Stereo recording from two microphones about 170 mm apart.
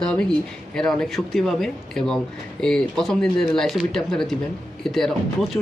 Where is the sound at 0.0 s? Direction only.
5° left (ahead or behind).